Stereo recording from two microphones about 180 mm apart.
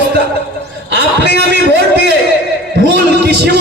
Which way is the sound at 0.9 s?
70° right (ahead or behind).